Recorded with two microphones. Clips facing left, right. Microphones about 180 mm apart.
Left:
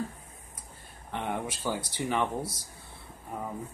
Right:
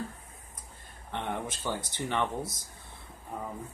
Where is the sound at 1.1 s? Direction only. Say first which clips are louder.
Left 1 dB; 10° left (ahead or behind).